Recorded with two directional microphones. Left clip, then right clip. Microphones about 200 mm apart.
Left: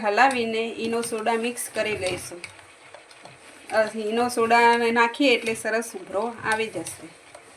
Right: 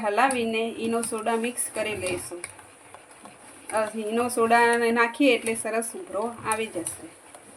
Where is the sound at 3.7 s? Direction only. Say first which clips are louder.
Left 4 dB; 20° left (ahead or behind).